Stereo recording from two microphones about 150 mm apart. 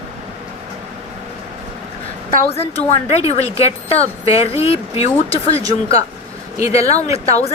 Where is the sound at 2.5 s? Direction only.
45° left (ahead or behind).